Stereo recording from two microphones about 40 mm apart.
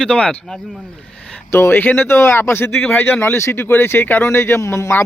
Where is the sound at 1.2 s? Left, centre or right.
Left.